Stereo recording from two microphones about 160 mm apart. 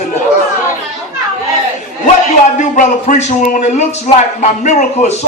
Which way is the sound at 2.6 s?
50° left (ahead or behind).